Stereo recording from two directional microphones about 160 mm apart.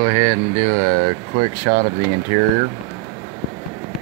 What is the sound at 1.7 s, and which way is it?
Speech, 50° right (ahead or behind).